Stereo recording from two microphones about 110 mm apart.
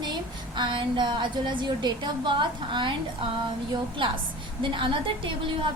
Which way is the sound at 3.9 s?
50° right (ahead or behind).